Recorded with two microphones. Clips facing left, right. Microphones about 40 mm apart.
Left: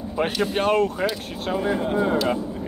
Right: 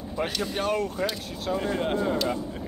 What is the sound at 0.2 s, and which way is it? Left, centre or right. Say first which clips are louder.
Speech: left 6 dB; left.